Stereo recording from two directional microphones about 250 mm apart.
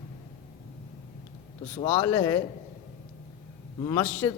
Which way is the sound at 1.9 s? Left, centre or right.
Centre.